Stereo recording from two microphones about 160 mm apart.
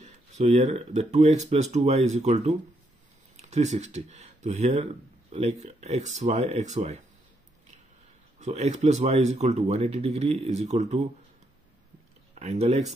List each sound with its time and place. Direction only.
0.0 s speech: 45° right (ahead or behind)
8.4 s speech: 45° right (ahead or behind)
12.4 s speech: 40° right (ahead or behind)